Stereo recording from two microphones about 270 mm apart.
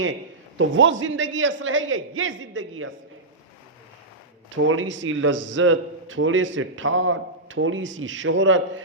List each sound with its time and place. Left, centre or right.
0.6 s a man's voice: right
4.5 s a man's voice: right